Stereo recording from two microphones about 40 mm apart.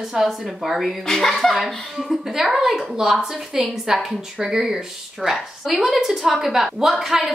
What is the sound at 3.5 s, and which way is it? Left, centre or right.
Speech, centre.